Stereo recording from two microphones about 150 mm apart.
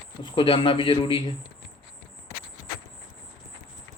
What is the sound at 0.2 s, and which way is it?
A man's voice, 35° left (ahead or behind).